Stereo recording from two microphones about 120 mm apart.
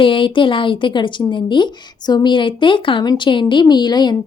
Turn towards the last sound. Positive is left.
turn(degrees=35)  # may be behind; listen again after turning